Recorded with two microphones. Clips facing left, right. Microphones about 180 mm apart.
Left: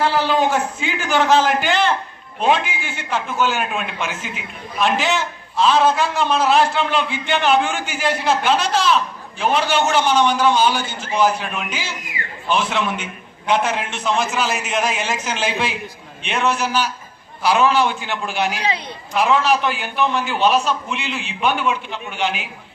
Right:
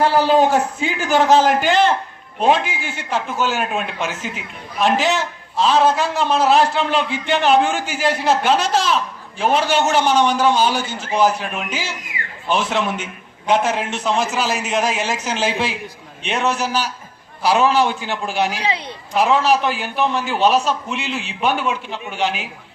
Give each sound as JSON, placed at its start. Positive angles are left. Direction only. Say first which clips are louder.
{"t": 0.0, "sound": "a man's voice", "louder": "right 3 dB", "side_deg": -40}